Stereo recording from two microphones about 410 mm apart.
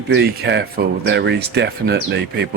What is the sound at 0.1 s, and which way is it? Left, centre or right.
Speech, right.